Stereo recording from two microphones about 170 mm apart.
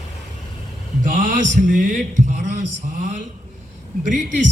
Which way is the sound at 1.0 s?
50° right (ahead or behind).